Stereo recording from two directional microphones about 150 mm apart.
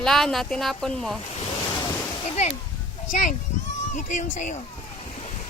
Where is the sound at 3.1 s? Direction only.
60° left (ahead or behind).